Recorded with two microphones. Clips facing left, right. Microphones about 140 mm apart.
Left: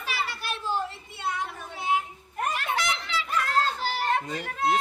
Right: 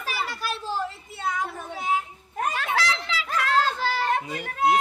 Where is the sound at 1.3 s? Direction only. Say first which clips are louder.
Right 3 dB; 90° right.